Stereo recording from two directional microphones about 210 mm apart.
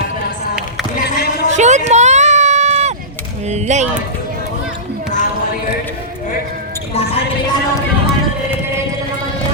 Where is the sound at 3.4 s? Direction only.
30° right (ahead or behind).